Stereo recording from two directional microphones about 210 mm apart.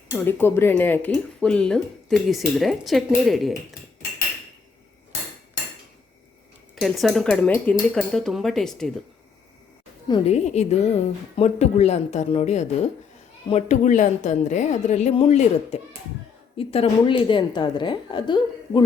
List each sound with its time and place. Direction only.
0.3 s speech: 10° left (ahead or behind)
6.8 s speech: centre (ahead or behind)
10.1 s a woman's voice: 30° left (ahead or behind)